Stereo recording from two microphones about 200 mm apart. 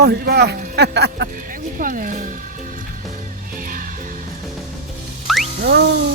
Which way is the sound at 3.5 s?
45° right (ahead or behind).